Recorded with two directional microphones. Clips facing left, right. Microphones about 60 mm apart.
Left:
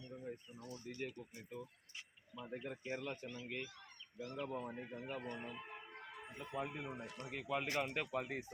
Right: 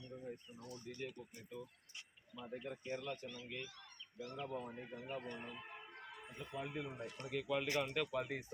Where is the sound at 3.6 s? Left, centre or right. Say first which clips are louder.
Left 2 dB; centre.